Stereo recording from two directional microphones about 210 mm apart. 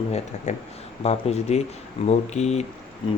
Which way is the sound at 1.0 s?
30° left (ahead or behind).